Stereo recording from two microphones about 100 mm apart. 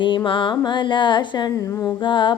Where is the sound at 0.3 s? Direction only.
55° left (ahead or behind).